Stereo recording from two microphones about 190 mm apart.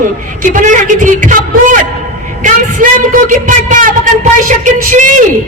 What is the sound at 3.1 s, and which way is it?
A man's voice, 45° right (ahead or behind).